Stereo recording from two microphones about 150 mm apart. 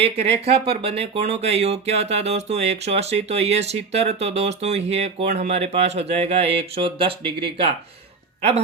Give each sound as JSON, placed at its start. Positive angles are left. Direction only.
{"t": 0.0, "sound": "speech", "side_deg": -40}